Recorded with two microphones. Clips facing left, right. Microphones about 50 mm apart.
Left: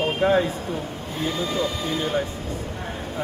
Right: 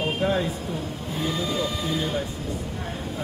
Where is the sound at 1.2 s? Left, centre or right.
Centre.